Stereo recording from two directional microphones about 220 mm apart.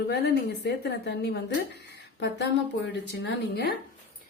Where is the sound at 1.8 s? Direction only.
50° left (ahead or behind).